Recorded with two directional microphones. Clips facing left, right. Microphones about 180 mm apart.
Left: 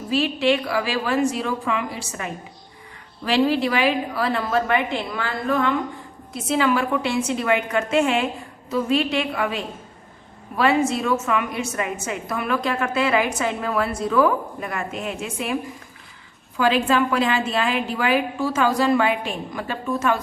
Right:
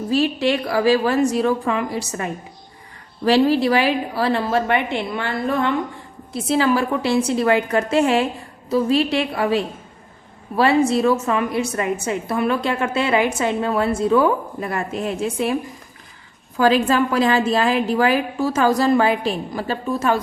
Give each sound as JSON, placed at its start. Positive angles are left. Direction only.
{"t": 0.1, "sound": "a woman's voice", "side_deg": -40}
{"t": 16.6, "sound": "a woman's voice", "side_deg": -40}